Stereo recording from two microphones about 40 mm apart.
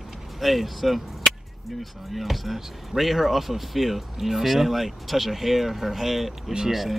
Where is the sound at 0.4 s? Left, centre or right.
Centre.